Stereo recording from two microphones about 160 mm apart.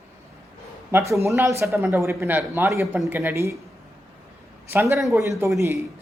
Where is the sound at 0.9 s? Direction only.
15° right (ahead or behind).